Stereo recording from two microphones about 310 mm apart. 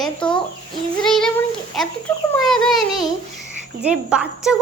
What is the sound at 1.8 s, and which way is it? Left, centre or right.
A child's voice, centre.